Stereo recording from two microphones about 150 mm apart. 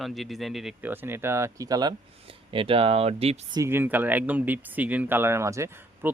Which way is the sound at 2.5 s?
35° right (ahead or behind).